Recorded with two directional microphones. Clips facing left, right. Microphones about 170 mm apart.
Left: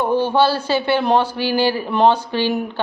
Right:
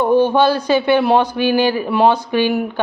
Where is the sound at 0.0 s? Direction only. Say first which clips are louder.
Right 3 dB; 15° right (ahead or behind).